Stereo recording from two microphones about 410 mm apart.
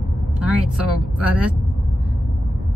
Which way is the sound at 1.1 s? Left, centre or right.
Left.